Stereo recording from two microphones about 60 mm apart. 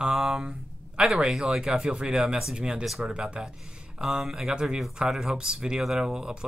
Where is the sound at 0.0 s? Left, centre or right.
Centre.